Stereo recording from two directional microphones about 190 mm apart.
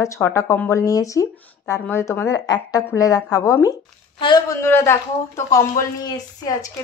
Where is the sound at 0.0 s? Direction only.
15° left (ahead or behind).